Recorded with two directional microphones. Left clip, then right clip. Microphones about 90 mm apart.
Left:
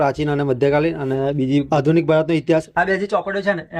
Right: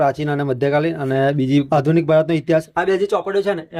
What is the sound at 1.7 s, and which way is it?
Speech, centre (ahead or behind).